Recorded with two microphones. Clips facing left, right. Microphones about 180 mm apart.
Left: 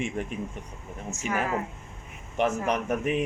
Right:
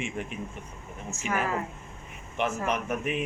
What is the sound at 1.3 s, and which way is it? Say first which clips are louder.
Speech: left 1 dB; 20° left (ahead or behind).